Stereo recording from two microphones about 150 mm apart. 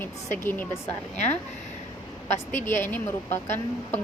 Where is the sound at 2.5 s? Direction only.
15° left (ahead or behind).